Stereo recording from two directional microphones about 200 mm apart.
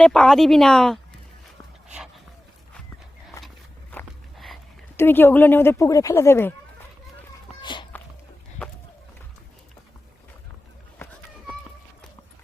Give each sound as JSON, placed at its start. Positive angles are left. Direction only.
{"t": 0.0, "sound": "speech", "side_deg": 5}
{"t": 1.9, "sound": "dog", "side_deg": -5}
{"t": 3.9, "sound": "walk", "side_deg": 0}
{"t": 4.9, "sound": "speech", "side_deg": 10}
{"t": 7.6, "sound": "a sound", "side_deg": 25}